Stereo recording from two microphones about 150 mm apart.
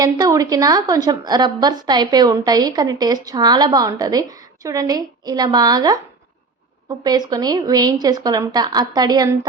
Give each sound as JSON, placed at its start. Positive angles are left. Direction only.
{"t": 0.0, "sound": "a woman's voice", "side_deg": -25}